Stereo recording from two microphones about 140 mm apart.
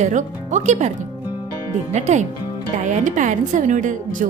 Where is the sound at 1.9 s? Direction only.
55° right (ahead or behind).